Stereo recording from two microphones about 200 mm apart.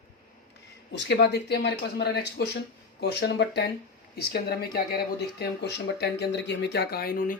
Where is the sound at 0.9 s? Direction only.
60° left (ahead or behind).